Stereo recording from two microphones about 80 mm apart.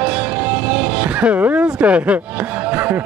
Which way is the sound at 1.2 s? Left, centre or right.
Right.